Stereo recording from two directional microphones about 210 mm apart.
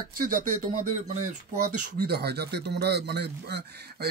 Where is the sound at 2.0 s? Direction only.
50° right (ahead or behind).